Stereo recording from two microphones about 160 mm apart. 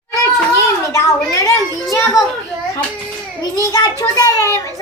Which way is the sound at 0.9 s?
20° left (ahead or behind).